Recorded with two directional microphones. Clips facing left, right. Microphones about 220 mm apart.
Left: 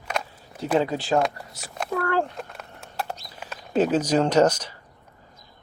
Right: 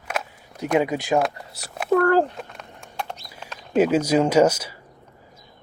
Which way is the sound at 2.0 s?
40° right (ahead or behind).